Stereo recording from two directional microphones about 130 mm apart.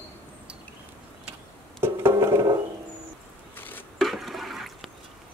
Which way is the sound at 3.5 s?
15° left (ahead or behind).